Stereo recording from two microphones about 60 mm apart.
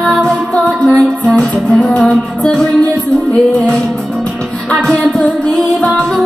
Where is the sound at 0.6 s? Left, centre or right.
Centre.